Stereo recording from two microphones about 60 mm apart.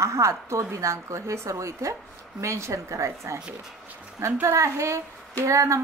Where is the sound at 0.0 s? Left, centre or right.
Right.